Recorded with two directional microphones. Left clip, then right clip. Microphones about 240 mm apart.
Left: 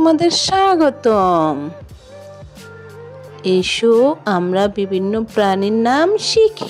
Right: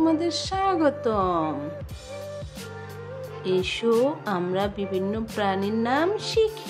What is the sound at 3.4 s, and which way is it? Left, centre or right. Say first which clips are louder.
Speech: left 10 dB; left.